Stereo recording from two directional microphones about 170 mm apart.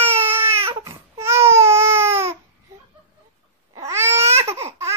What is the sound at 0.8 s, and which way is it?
Baby cry, 15° right (ahead or behind).